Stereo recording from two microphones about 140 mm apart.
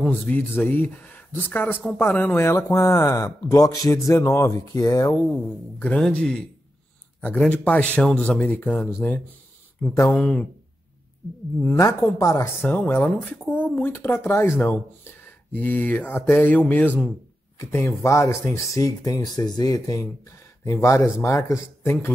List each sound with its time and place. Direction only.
0.0 s speech: 10° left (ahead or behind); by 5.1 s 25° left (ahead or behind)
5.3 s speech: 5° left (ahead or behind)
11.6 s speech: 20° left (ahead or behind)